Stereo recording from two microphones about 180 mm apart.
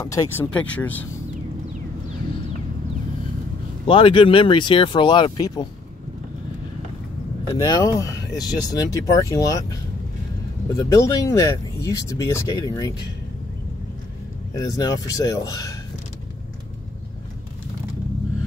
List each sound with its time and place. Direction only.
0.0 s speech: 20° left (ahead or behind)
3.8 s speech: 30° left (ahead or behind)
7.5 s speech: 20° left (ahead or behind)
14.5 s speech: 20° left (ahead or behind)